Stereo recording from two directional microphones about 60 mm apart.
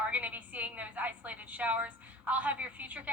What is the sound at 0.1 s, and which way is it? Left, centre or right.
A woman's voice, right.